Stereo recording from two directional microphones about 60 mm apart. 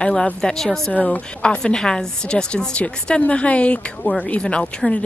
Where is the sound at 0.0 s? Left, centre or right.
Centre.